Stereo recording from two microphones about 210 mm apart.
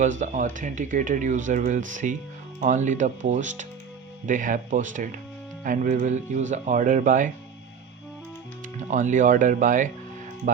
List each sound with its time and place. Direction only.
0.0 s speech: 35° right (ahead or behind)
8.9 s speech: 35° right (ahead or behind)